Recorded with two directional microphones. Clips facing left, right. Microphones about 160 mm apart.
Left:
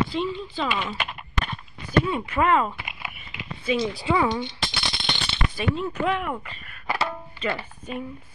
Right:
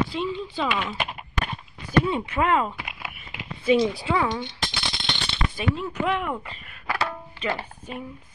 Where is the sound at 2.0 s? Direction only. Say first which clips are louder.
Left 1 dB; 20° right (ahead or behind).